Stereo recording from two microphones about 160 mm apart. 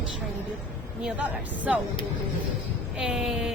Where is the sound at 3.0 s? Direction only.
5° right (ahead or behind).